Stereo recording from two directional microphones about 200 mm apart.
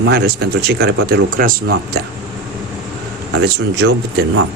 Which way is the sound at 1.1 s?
50° right (ahead or behind).